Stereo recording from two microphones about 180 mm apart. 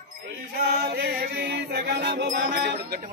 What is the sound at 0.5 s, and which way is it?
Music, 60° right (ahead or behind).